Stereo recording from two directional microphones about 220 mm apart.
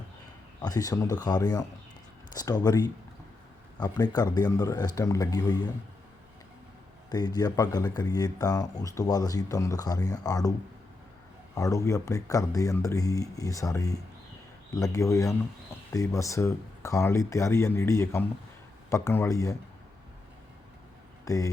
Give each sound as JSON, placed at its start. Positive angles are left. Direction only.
{"t": 0.6, "sound": "speech", "side_deg": 15}
{"t": 7.1, "sound": "speech", "side_deg": 20}
{"t": 11.5, "sound": "speech", "side_deg": 15}
{"t": 21.2, "sound": "speech", "side_deg": 15}